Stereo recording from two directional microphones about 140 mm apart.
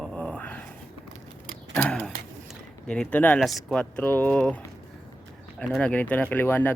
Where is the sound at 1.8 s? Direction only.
5° left (ahead or behind).